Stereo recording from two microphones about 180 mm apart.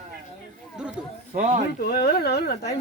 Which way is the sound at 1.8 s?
60° left (ahead or behind).